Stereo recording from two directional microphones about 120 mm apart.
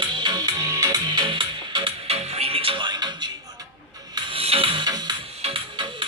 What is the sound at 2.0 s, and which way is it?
Music, 55° right (ahead or behind).